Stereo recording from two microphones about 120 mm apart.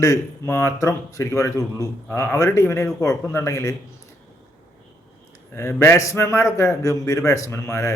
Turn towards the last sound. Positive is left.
turn(degrees=25)  # may be behind; listen again after turning